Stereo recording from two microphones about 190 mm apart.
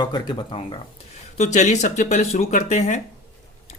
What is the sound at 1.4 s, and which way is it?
Speech, 35° left (ahead or behind).